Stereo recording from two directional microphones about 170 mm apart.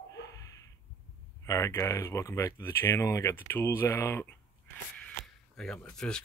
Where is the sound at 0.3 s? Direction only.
20° left (ahead or behind).